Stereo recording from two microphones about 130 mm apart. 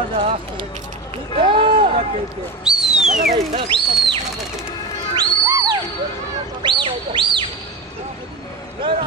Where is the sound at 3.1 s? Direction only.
90° right.